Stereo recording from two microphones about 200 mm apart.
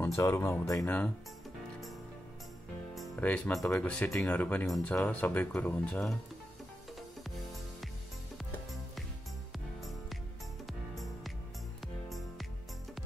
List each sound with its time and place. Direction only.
0.0 s speech: 15° left (ahead or behind)
2.9 s speech: 5° left (ahead or behind)
9.8 s music: centre (ahead or behind)